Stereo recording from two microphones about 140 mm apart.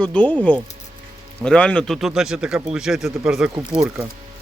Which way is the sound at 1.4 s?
10° left (ahead or behind).